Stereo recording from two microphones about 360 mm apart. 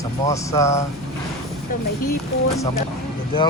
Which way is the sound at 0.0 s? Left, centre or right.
Centre.